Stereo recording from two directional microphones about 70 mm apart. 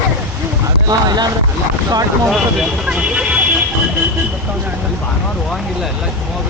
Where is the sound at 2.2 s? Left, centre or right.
Centre.